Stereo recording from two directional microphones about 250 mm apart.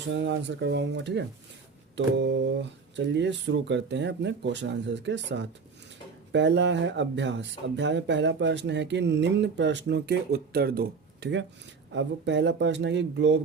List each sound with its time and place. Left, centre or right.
0.1 s speech: right